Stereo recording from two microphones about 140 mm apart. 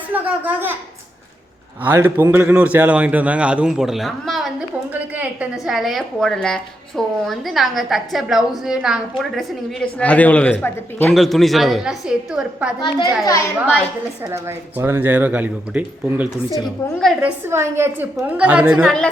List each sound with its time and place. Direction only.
0.1 s a woman's voice: 10° right (ahead or behind)
1.8 s a man's voice: 15° right (ahead or behind); by 11.1 s 15° left (ahead or behind)
11.1 s a woman's voice: centre (ahead or behind)
12.8 s a child's voice: 25° left (ahead or behind)
14.3 s a man's voice: 20° right (ahead or behind)
18.8 s a woman's voice: 5° left (ahead or behind)